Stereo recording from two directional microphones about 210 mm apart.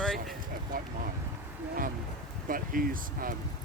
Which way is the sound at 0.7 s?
40° right (ahead or behind).